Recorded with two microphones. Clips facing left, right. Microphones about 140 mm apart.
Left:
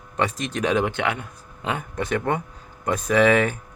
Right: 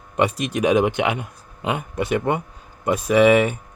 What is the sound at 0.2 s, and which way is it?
Speech, 10° right (ahead or behind).